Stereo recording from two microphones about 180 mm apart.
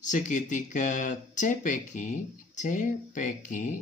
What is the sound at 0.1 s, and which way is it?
Speech, 45° left (ahead or behind).